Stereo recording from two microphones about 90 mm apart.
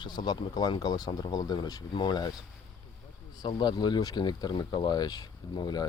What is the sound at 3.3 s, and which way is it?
Speech, 55° left (ahead or behind).